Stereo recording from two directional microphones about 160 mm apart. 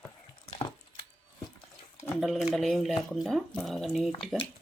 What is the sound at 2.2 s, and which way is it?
Speech, centre (ahead or behind).